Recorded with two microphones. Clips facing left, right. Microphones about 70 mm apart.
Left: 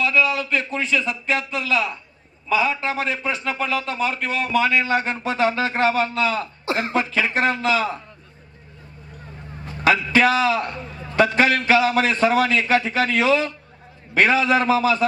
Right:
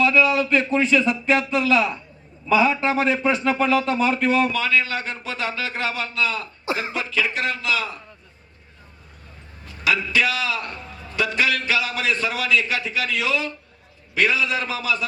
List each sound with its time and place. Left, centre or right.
0.0 s a man's voice: centre
4.5 s a man's voice: centre
9.6 s a man's voice: left